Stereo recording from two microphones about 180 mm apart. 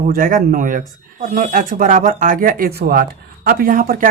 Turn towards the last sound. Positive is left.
turn(degrees=-50)  # may be behind; listen again after turning